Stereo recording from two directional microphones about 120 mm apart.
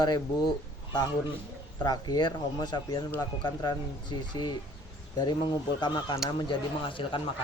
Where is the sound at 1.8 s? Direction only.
35° left (ahead or behind).